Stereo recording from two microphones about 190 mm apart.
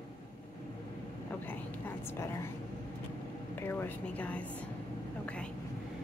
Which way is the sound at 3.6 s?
10° left (ahead or behind).